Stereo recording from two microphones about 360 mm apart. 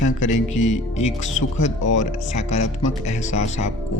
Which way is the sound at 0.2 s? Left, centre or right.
Centre.